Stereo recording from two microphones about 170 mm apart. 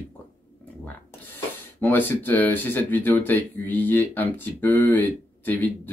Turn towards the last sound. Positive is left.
turn(degrees=10)  # may be behind; listen again after turning